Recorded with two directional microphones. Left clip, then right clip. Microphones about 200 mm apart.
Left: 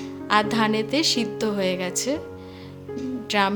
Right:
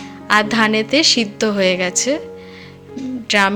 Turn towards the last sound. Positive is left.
turn(degrees=-5)  # may be behind; listen again after turning